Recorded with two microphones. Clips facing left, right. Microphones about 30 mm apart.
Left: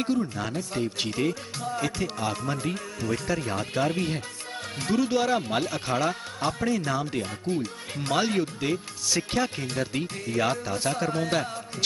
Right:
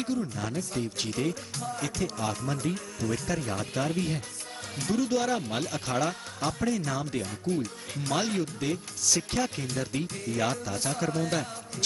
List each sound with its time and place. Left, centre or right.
0.0 s speech: left